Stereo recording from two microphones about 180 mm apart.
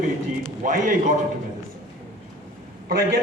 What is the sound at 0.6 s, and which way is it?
Speech, 45° right (ahead or behind).